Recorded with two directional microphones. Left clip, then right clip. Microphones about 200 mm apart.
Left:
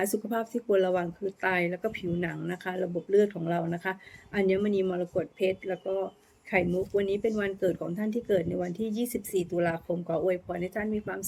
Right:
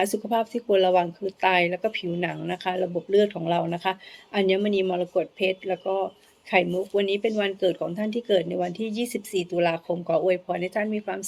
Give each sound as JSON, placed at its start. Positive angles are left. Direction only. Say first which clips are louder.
{"t": 0.0, "sound": "speech", "louder": "right 6 dB", "side_deg": 15}